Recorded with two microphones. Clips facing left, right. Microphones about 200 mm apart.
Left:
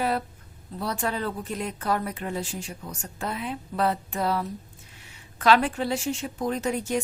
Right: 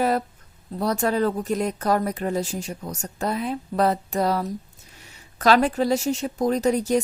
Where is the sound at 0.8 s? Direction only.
40° right (ahead or behind).